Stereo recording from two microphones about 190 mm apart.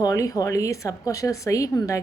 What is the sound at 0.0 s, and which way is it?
A woman's voice, 15° left (ahead or behind).